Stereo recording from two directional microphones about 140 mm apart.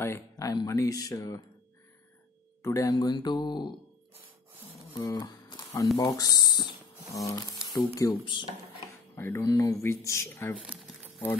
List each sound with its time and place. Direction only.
0.0 s speech: 20° left (ahead or behind)
2.6 s speech: 20° left (ahead or behind)
4.9 s a sound: 30° left (ahead or behind)
6.0 s speech: 30° left (ahead or behind)
8.1 s speech: 35° left (ahead or behind)
9.1 s speech: 20° left (ahead or behind)